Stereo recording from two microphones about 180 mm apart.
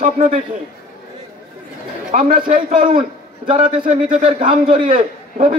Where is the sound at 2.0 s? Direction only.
50° right (ahead or behind).